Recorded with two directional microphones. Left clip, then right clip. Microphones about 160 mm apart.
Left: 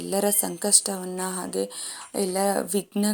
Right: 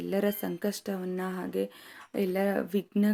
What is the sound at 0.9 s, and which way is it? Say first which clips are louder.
Speech: left 3 dB; 5° right (ahead or behind).